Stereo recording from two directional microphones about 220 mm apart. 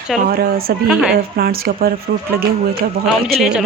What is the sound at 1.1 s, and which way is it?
Speech, 45° right (ahead or behind).